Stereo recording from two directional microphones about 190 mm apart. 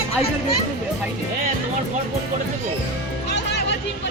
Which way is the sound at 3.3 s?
65° left (ahead or behind).